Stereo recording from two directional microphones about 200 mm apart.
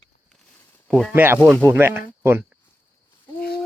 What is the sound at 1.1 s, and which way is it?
Speech, 10° right (ahead or behind).